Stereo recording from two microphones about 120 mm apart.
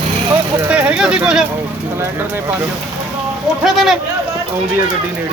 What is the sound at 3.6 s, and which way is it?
Speech, centre (ahead or behind).